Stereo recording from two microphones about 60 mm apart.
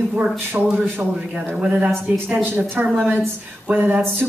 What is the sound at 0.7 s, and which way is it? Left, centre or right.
Speech, right.